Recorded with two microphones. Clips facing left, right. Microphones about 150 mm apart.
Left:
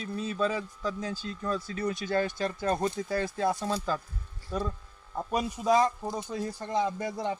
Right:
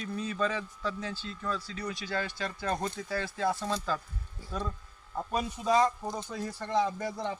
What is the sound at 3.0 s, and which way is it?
Speech, 30° left (ahead or behind).